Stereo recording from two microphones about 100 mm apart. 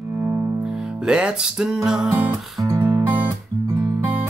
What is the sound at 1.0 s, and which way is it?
Music, 10° right (ahead or behind).